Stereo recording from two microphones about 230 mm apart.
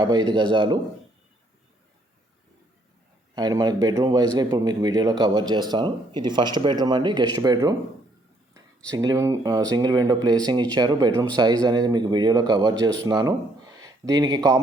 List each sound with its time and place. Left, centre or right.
0.0 s speech: centre
3.3 s speech: centre
8.9 s speech: centre